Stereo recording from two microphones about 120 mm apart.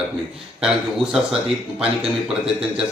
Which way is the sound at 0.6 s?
Centre (ahead or behind).